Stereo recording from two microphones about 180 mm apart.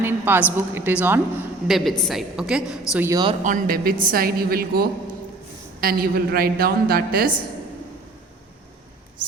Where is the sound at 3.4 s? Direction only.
50° right (ahead or behind).